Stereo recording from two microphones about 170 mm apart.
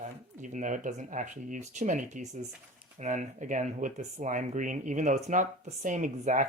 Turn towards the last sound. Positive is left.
turn(degrees=-50)  # may be behind; listen again after turning